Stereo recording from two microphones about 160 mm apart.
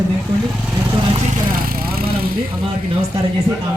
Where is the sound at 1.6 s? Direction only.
65° right (ahead or behind).